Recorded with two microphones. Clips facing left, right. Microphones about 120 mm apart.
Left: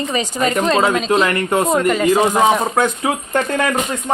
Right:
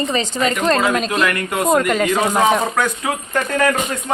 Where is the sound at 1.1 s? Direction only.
30° left (ahead or behind).